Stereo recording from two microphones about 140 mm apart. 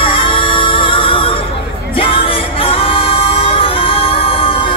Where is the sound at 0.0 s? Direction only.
40° left (ahead or behind).